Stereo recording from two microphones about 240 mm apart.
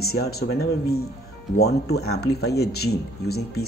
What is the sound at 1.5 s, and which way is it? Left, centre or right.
Speech, left.